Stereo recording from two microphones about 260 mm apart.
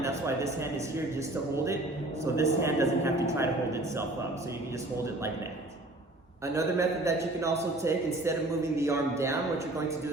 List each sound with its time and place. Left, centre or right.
0.0 s a man's voice: centre
6.5 s a man's voice: centre